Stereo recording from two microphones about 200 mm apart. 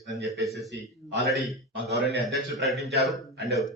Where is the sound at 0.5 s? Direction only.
60° right (ahead or behind).